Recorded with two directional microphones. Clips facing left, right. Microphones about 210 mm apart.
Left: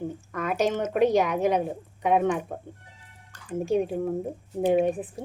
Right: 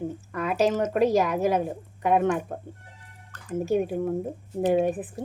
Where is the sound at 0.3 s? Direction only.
Centre (ahead or behind).